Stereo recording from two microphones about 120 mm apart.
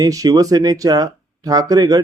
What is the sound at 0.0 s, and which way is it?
Speech, 30° right (ahead or behind).